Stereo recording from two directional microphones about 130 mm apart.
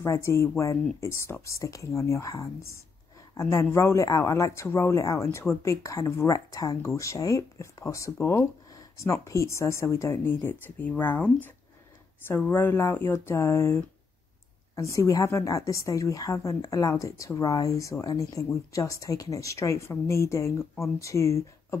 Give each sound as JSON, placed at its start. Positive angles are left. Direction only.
{"t": 0.0, "sound": "speech", "side_deg": 20}
{"t": 14.8, "sound": "speech", "side_deg": 25}